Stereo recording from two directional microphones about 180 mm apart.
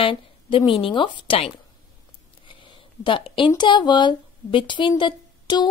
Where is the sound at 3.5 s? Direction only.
25° left (ahead or behind).